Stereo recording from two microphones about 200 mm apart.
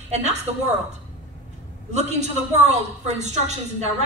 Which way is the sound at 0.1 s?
35° right (ahead or behind).